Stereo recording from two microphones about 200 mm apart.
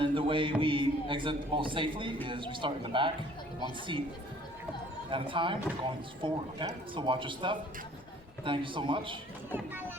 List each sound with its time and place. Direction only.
0.0 s music: 25° right (ahead or behind)
0.6 s speech: 25° right (ahead or behind)
5.1 s speech: 25° right (ahead or behind)